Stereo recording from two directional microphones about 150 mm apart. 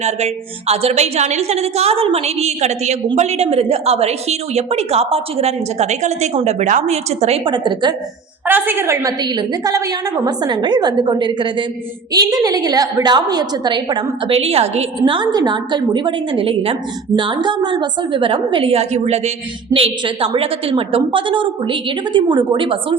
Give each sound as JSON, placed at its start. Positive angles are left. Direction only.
{"t": 0.7, "sound": "a woman's voice", "side_deg": -45}
{"t": 8.4, "sound": "a woman's voice", "side_deg": -15}
{"t": 9.2, "sound": "a woman's voice", "side_deg": -30}